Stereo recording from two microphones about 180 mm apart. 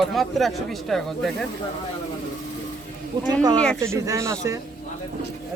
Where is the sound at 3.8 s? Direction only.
15° right (ahead or behind).